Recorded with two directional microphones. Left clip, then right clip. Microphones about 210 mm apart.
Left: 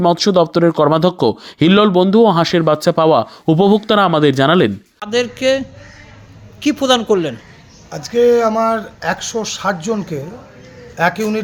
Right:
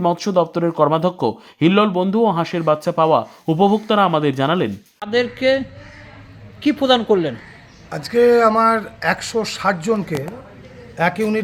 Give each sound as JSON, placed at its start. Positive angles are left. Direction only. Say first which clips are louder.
{"t": 0.0, "sound": "speech", "louder": "left 5 dB", "side_deg": 20}
{"t": 4.9, "sound": "speech", "louder": "even", "side_deg": 5}
{"t": 7.9, "sound": "speech", "louder": "left 2 dB", "side_deg": -5}